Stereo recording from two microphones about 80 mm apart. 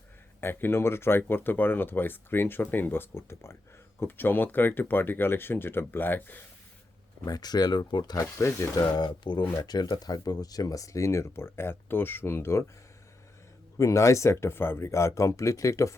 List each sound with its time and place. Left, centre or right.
0.4 s speech: left
7.3 s speech: left
8.1 s speech: left
8.9 s speech: left
9.6 s speech: left
13.7 s speech: left